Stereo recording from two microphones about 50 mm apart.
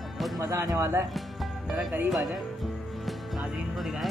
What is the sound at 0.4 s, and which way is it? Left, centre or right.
Speech, right.